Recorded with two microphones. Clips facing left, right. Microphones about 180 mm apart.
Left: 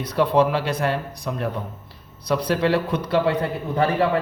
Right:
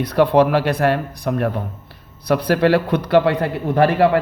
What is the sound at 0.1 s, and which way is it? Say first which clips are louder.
A man's voice: right 4 dB; 65° right (ahead or behind).